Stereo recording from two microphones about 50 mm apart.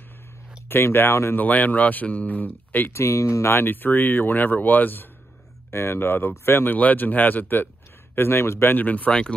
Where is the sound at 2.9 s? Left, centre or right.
Left.